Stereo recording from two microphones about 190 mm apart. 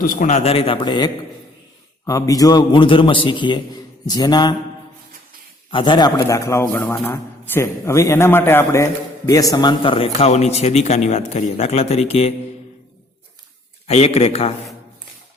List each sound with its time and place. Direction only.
0.0 s a man's voice: 45° left (ahead or behind); by 4.5 s 20° left (ahead or behind)
5.7 s a man's voice: 25° left (ahead or behind)
13.8 s a man's voice: 35° left (ahead or behind)